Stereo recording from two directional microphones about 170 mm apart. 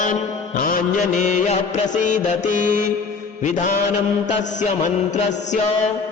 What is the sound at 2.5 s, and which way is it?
Mantra, 60° right (ahead or behind).